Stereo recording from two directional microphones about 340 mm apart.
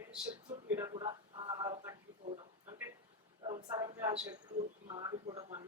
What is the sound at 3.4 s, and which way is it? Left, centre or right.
A man's voice, centre.